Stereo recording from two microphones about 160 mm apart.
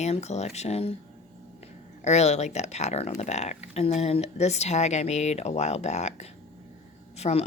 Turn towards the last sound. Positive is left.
turn(degrees=40)  # may be behind; listen again after turning